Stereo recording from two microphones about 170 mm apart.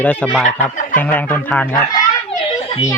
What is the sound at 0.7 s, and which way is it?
Fowl, 50° left (ahead or behind).